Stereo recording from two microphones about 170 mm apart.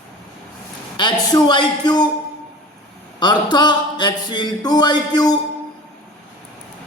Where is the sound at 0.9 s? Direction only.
25° left (ahead or behind).